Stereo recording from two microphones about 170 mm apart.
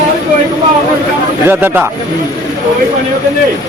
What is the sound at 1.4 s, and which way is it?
Speech, 10° right (ahead or behind).